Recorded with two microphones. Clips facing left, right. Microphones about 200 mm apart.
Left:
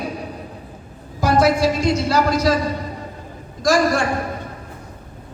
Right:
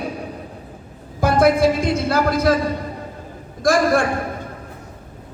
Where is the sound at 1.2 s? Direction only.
55° right (ahead or behind).